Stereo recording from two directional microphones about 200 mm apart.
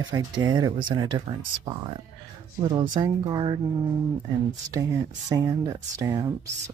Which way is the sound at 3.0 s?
20° right (ahead or behind).